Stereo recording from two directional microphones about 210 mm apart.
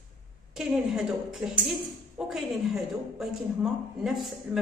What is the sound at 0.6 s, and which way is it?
A woman's voice, centre (ahead or behind).